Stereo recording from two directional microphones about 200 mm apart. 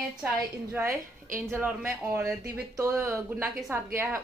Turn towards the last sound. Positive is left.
turn(degrees=-10)  # may be behind; listen again after turning